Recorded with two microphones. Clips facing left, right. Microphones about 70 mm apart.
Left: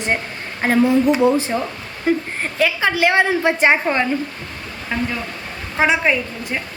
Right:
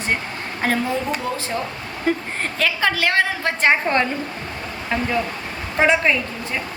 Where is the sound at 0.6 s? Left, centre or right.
Centre.